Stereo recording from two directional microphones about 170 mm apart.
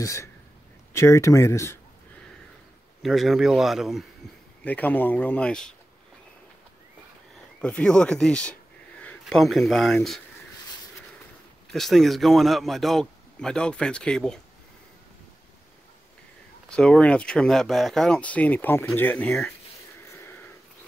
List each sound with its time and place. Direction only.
0.0 s speech: 20° left (ahead or behind)
3.0 s speech: centre (ahead or behind)
4.6 s speech: 10° left (ahead or behind)
7.6 s speech: 5° left (ahead or behind)
11.7 s speech: centre (ahead or behind)
16.6 s speech: 5° left (ahead or behind)
20.1 s a sound: 15° left (ahead or behind)